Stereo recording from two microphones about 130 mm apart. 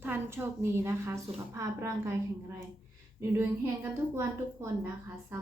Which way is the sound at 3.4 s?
20° right (ahead or behind).